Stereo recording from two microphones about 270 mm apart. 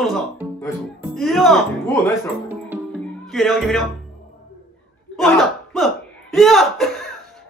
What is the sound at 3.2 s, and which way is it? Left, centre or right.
Speech, centre.